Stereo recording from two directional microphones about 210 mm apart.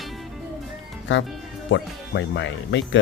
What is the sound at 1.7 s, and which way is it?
Speech, 60° left (ahead or behind).